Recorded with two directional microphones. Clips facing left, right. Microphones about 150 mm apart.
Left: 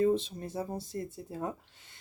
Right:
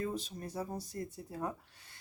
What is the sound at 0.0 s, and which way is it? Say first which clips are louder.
Speech: left 10 dB; 30° left (ahead or behind).